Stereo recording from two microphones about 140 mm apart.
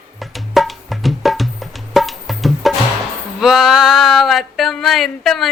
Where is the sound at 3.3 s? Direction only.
Centre (ahead or behind).